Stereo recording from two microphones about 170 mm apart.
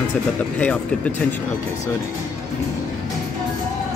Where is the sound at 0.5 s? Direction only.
10° left (ahead or behind).